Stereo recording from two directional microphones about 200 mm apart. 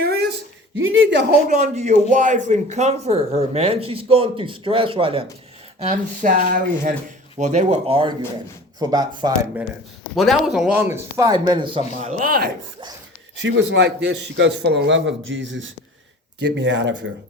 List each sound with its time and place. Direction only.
0.0 s a sound: 55° right (ahead or behind)
0.8 s speech: 80° right
1.5 s speech: 35° right (ahead or behind)
5.8 s speech: 40° right (ahead or behind); by 9.5 s 20° right (ahead or behind)
10.2 s speech: centre (ahead or behind); by 11.8 s 25° right (ahead or behind)
11.9 s speech: 35° right (ahead or behind)
13.4 s a man's voice: 60° right (ahead or behind)